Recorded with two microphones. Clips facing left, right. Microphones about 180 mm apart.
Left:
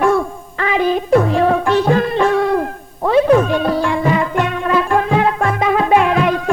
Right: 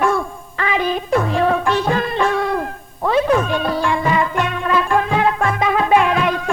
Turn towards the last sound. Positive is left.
turn(degrees=40)  # may be behind; listen again after turning